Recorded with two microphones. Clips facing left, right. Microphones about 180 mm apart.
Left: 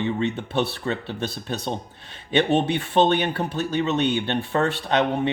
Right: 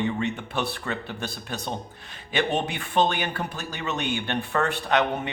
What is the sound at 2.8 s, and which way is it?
Speech, 30° left (ahead or behind).